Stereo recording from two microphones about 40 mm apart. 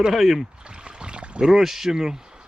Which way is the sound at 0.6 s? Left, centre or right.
Right.